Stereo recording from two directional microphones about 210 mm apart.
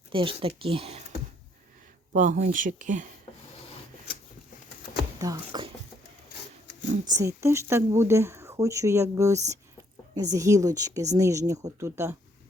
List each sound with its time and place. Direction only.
0.1 s speech: 25° right (ahead or behind)
2.1 s speech: 35° right (ahead or behind)
5.2 s speech: 20° right (ahead or behind)
7.1 s speech: 15° right (ahead or behind)